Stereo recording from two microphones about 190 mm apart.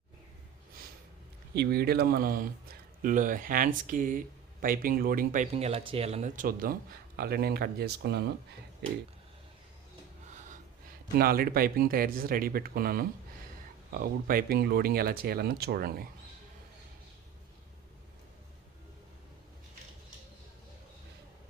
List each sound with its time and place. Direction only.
1.5 s speech: 55° right (ahead or behind)
11.2 s speech: 50° right (ahead or behind)